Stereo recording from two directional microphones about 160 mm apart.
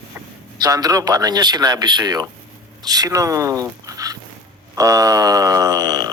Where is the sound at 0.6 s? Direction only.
25° right (ahead or behind).